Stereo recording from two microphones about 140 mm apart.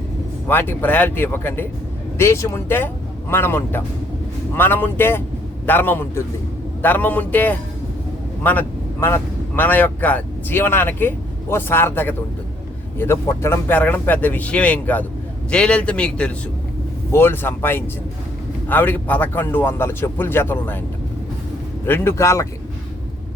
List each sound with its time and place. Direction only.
0.4 s a man's voice: 15° left (ahead or behind)
21.8 s speech: 15° left (ahead or behind)